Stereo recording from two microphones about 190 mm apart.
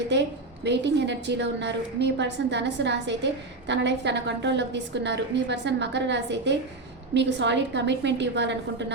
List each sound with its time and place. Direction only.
0.1 s a woman's voice: 65° right (ahead or behind)